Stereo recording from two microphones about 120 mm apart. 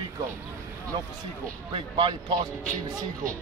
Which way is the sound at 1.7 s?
45° right (ahead or behind).